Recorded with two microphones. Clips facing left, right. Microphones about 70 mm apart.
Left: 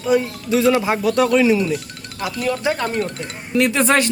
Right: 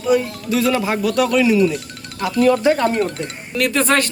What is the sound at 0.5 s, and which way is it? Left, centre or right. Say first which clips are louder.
Speech: left 2 dB; left.